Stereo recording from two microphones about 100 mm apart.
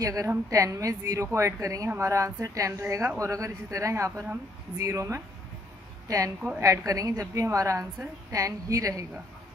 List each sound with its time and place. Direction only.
0.0 s a woman's voice: 35° right (ahead or behind)